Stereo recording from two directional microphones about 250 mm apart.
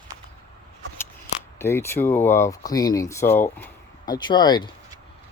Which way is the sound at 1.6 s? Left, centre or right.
Centre.